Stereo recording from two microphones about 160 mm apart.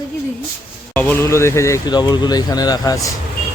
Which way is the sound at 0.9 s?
15° left (ahead or behind).